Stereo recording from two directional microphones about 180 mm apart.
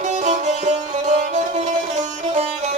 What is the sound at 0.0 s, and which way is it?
Music, 40° right (ahead or behind).